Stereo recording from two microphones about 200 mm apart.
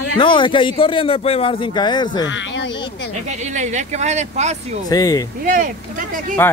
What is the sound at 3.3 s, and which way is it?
Speech, 35° right (ahead or behind).